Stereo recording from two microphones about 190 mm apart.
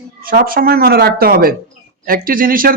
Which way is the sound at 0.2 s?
50° right (ahead or behind).